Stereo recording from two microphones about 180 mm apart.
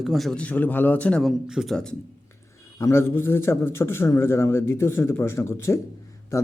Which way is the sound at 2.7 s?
15° left (ahead or behind).